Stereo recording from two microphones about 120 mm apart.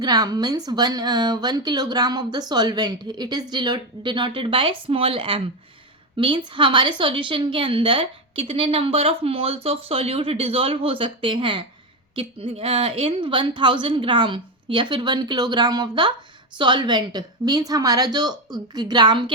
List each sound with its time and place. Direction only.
0.0 s a woman's voice: 35° right (ahead or behind)